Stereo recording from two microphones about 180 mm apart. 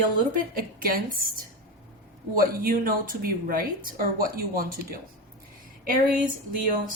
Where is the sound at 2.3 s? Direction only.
55° right (ahead or behind).